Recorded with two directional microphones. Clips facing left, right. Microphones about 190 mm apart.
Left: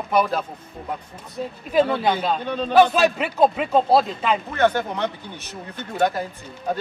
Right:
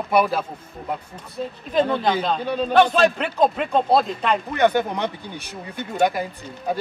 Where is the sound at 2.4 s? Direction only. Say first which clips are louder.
Right 2 dB; 10° right (ahead or behind).